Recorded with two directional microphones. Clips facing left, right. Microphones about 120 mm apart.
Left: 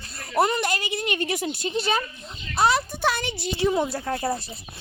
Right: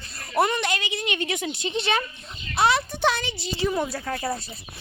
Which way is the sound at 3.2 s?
50° left (ahead or behind).